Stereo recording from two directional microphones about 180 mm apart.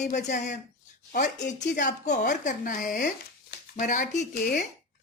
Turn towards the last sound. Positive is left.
turn(degrees=50)  # may be behind; listen again after turning